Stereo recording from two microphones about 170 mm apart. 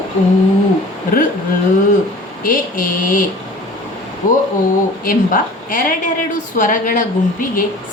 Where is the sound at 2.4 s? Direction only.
55° left (ahead or behind).